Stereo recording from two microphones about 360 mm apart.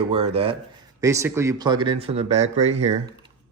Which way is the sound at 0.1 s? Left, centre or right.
Centre.